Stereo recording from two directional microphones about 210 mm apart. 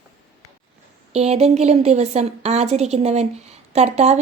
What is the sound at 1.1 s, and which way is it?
A woman's voice, 30° right (ahead or behind).